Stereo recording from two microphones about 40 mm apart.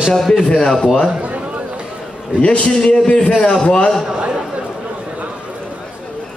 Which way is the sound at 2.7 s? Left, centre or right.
Centre.